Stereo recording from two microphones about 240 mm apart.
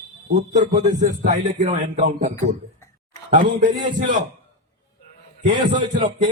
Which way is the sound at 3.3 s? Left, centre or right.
Right.